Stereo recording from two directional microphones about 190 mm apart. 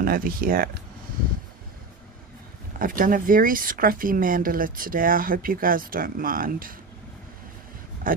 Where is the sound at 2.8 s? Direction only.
45° right (ahead or behind).